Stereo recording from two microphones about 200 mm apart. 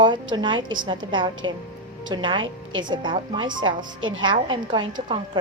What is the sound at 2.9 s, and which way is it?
Speech, 25° right (ahead or behind).